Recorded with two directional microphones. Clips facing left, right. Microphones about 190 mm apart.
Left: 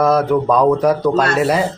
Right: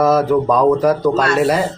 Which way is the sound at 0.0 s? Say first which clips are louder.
Right 1 dB; centre (ahead or behind).